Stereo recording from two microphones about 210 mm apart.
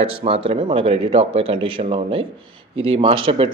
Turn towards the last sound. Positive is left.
turn(degrees=-25)  # may be behind; listen again after turning